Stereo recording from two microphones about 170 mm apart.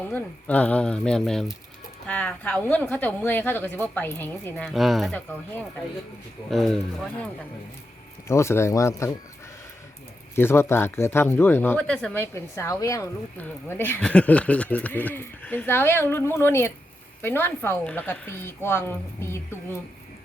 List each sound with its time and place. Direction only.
0.1 s speech: 10° left (ahead or behind)
4.7 s speech: centre (ahead or behind)
6.5 s speech: centre (ahead or behind)
8.3 s speech: 15° left (ahead or behind)
10.3 s speech: 15° left (ahead or behind)